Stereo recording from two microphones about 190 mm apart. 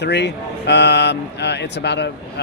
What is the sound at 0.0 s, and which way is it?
Speech, 60° left (ahead or behind).